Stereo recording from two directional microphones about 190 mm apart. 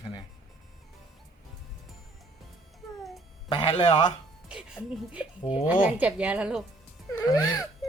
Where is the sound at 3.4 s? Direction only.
25° left (ahead or behind).